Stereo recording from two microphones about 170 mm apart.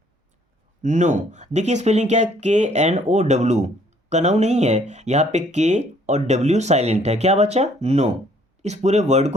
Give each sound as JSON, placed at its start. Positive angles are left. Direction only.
{"t": 0.8, "sound": "speech", "side_deg": -45}